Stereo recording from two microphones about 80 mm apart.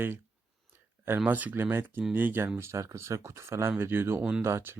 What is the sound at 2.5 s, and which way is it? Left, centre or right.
Speech, right.